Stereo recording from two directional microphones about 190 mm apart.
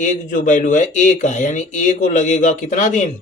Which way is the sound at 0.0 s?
40° left (ahead or behind).